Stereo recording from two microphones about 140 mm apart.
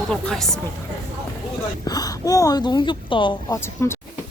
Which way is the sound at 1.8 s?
25° left (ahead or behind).